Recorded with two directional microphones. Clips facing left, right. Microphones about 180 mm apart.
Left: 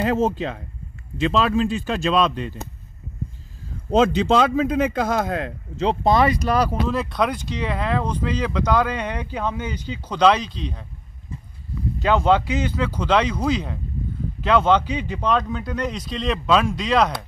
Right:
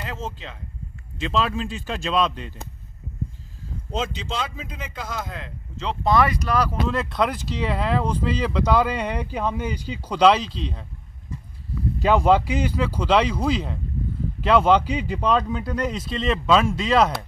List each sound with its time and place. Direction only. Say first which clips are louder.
0.0 s speech: left 13 dB; 55° left (ahead or behind)
3.9 s speech: left 12 dB; 60° left (ahead or behind)
6.0 s speech: left 1 dB; 25° left (ahead or behind)
6.9 s speech: left 1 dB; centre (ahead or behind)
12.0 s speech: even; 5° right (ahead or behind)